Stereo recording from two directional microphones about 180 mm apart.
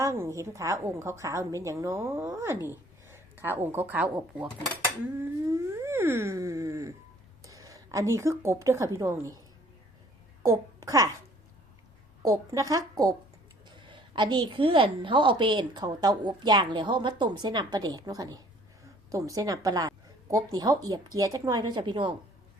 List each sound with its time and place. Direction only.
0.0 s a woman's voice: 15° right (ahead or behind)
5.5 s a woman's voice: 15° right (ahead or behind)
10.4 s a child's voice: 15° right (ahead or behind)
12.2 s a woman's voice: 20° right (ahead or behind)